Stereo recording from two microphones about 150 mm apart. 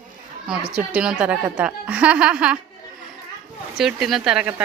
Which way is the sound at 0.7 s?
5° right (ahead or behind).